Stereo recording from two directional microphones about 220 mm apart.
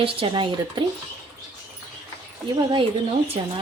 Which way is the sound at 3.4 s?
25° right (ahead or behind).